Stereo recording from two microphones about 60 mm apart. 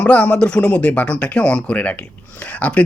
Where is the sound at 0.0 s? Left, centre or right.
Left.